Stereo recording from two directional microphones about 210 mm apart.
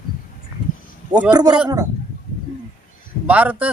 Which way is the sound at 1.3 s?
20° right (ahead or behind).